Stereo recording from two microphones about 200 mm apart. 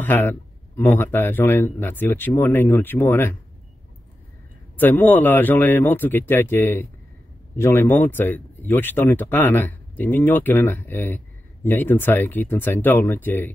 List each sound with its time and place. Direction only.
0.0 s speech: 10° left (ahead or behind)
4.7 s speech: 10° left (ahead or behind)